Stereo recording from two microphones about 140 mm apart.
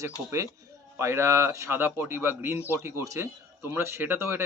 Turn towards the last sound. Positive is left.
turn(degrees=-15)  # may be behind; listen again after turning